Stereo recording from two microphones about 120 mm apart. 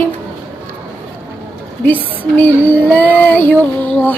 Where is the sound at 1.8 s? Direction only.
15° left (ahead or behind).